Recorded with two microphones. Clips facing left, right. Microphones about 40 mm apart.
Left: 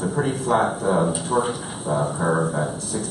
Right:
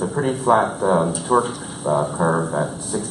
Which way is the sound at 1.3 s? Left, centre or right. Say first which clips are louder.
Right 5 dB; right.